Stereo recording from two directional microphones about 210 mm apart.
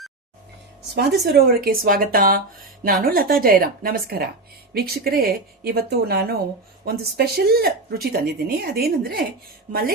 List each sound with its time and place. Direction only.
0.9 s speech: 50° right (ahead or behind)